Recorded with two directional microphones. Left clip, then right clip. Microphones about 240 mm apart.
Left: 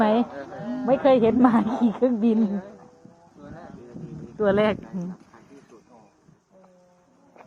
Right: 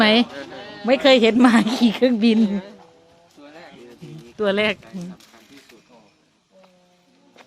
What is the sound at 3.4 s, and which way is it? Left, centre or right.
Music, right.